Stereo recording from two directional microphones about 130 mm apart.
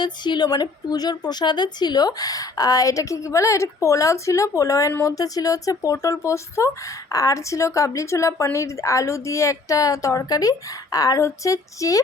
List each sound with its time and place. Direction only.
0.0 s a woman's voice: 35° left (ahead or behind)